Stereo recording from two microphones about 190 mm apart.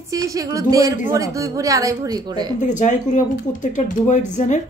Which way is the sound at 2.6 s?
40° left (ahead or behind).